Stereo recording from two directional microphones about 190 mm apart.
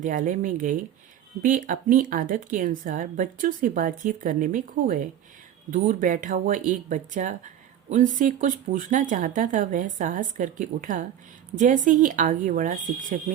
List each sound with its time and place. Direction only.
0.0 s speech: 45° right (ahead or behind)